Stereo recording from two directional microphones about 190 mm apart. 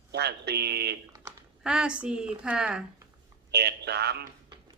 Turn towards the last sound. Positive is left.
turn(degrees=-60)  # may be behind; listen again after turning